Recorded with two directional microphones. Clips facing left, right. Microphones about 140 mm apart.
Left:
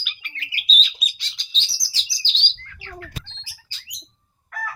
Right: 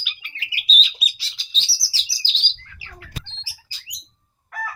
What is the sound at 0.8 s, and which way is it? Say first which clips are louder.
Bird: right 1 dB; 5° right (ahead or behind).